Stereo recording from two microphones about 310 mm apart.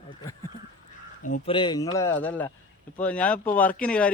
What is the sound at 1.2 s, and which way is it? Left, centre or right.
A man's voice, left.